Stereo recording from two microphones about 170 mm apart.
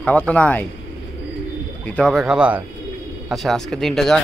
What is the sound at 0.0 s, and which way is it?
Speech, 10° left (ahead or behind).